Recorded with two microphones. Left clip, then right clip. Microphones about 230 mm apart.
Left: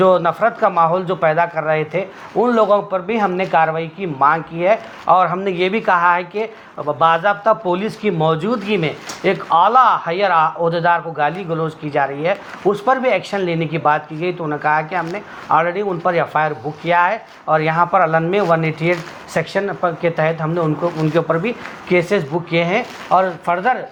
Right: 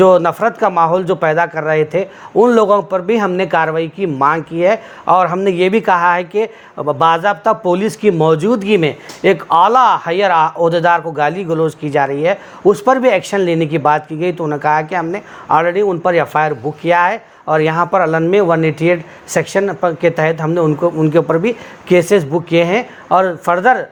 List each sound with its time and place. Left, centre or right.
0.0 s speech: right